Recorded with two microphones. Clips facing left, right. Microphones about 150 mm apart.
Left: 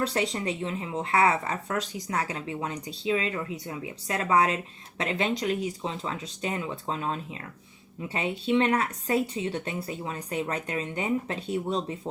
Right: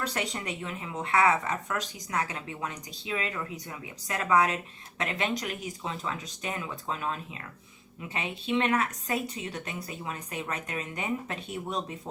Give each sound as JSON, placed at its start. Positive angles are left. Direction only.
{"t": 0.0, "sound": "speech", "side_deg": 30}